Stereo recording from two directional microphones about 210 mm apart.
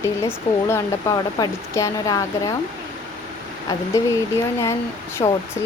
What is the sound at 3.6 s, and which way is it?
Speech, 15° left (ahead or behind).